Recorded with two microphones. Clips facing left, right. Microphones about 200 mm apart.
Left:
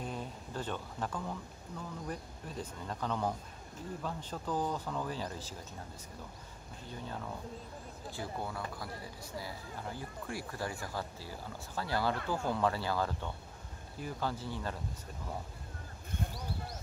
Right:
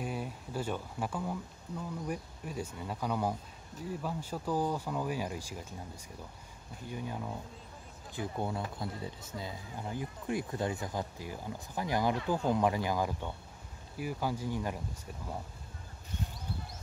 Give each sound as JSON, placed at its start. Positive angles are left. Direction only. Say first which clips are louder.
{"t": 0.0, "sound": "a sound", "louder": "right 3 dB", "side_deg": -10}
{"t": 2.0, "sound": "speech", "louder": "right 3 dB", "side_deg": -10}
{"t": 6.9, "sound": "speech", "louder": "right 3 dB", "side_deg": -15}
{"t": 16.1, "sound": "speech", "louder": "left 1 dB", "side_deg": 55}